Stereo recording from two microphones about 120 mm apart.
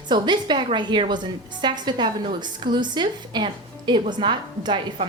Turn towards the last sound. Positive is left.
turn(degrees=-40)  # may be behind; listen again after turning